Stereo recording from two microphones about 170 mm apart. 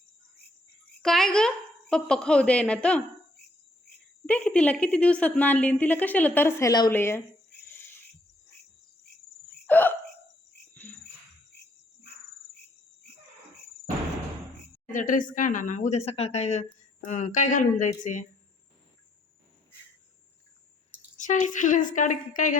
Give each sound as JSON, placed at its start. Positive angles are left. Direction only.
{"t": 1.0, "sound": "a woman's voice", "side_deg": 5}
{"t": 4.3, "sound": "a woman's voice", "side_deg": 5}
{"t": 7.6, "sound": "a sound", "side_deg": 15}
{"t": 9.6, "sound": "hiccup", "side_deg": 10}
{"t": 14.9, "sound": "a woman's voice", "side_deg": 50}
{"t": 21.2, "sound": "a woman's voice", "side_deg": 45}